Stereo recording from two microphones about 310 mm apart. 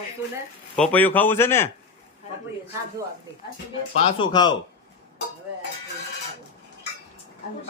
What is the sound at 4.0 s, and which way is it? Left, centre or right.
Speech, centre.